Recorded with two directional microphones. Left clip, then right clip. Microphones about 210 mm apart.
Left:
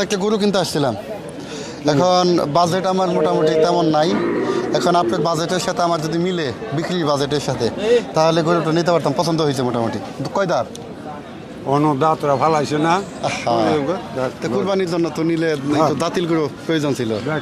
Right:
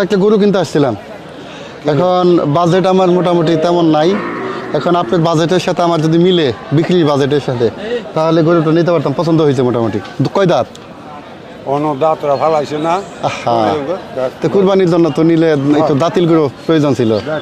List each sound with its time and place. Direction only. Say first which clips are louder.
0.0 s speech: right 8 dB; 25° right (ahead or behind)
4.7 s speech: right 4 dB; 25° right (ahead or behind)
5.1 s speech: right 7 dB; 45° right (ahead or behind)
11.7 s speech: right 3 dB; 35° left (ahead or behind)
13.2 s speech: right 5 dB; 35° right (ahead or behind)
13.7 s a man's voice: right 3 dB; 45° left (ahead or behind)
14.4 s speech: right 10 dB; 35° right (ahead or behind)